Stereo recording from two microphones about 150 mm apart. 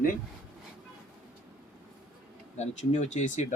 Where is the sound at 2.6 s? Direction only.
50° left (ahead or behind).